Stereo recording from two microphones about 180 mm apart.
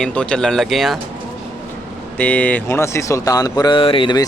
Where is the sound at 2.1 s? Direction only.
10° left (ahead or behind).